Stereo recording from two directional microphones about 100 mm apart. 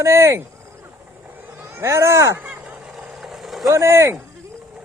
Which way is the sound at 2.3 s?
15° right (ahead or behind).